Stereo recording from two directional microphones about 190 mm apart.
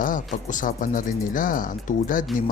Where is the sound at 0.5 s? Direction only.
45° left (ahead or behind).